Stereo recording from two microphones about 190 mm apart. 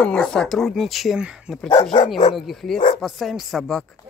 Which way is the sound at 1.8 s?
30° left (ahead or behind).